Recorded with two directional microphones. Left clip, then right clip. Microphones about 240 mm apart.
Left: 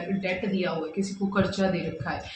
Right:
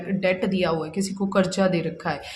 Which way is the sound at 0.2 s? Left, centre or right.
Right.